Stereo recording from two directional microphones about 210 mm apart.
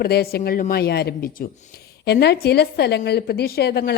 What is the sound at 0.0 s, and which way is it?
A woman's voice, 45° left (ahead or behind).